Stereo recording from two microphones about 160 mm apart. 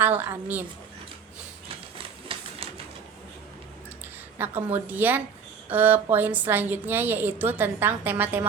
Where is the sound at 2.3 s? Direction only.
35° right (ahead or behind).